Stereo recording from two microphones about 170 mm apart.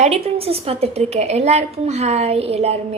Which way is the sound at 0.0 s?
35° right (ahead or behind).